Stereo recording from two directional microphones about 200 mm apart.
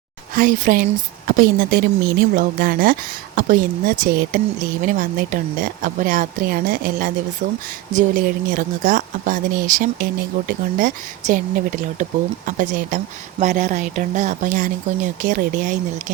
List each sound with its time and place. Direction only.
0.3 s speech: 45° right (ahead or behind)